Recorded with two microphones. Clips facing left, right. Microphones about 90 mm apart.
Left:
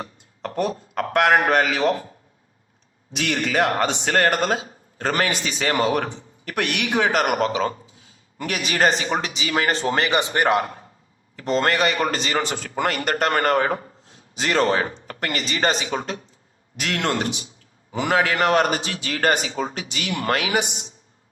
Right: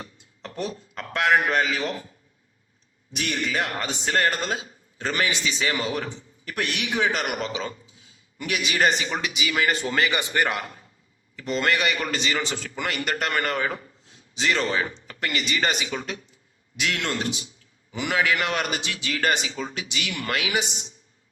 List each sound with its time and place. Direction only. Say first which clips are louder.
0.0 s a man's voice: left 8 dB; 50° left (ahead or behind)
3.3 s a man's voice: left 7 dB; 50° left (ahead or behind)
3.8 s a man's voice: left 4 dB; 60° left (ahead or behind); by 10.6 s 20° left (ahead or behind)
10.6 s a man's voice: left 9 dB; 45° left (ahead or behind)